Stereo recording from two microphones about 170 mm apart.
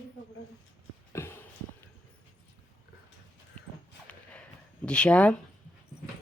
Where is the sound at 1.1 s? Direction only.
15° left (ahead or behind).